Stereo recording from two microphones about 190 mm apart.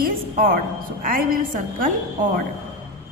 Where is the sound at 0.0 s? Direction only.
50° right (ahead or behind).